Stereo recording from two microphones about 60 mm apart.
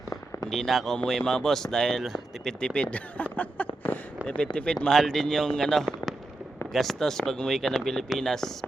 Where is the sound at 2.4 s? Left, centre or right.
Centre.